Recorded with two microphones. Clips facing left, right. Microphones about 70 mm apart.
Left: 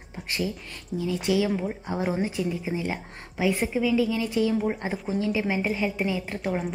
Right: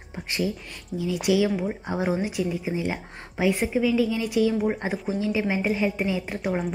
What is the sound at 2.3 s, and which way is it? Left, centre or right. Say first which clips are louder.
A woman's voice: right 1 dB; centre.